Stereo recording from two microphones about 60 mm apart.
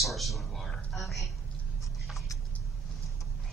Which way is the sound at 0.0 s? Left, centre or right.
Centre.